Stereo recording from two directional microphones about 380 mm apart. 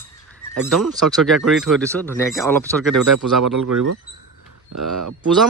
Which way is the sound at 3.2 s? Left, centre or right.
Right.